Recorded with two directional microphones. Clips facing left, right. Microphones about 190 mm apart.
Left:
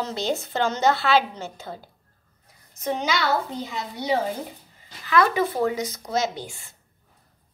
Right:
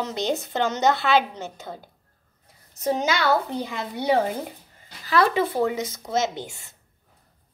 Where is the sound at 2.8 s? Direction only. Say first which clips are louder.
Right 2 dB; 45° right (ahead or behind).